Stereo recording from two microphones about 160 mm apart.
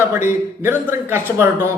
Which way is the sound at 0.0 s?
15° right (ahead or behind).